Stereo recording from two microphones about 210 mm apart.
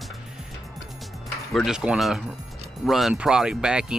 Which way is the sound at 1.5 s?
Centre (ahead or behind).